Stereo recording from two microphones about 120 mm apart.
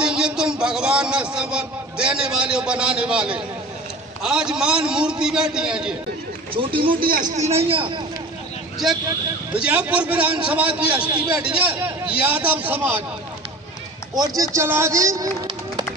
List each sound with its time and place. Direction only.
0.0 s a man's voice: 5° right (ahead or behind)
6.5 s a man's voice: 45° right (ahead or behind)
7.3 s a man's voice: 65° right (ahead or behind)
8.8 s a man's voice: 5° right (ahead or behind)
14.1 s a man's voice: 30° right (ahead or behind)